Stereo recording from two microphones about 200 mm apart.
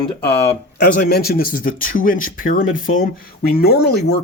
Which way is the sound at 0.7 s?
50° left (ahead or behind).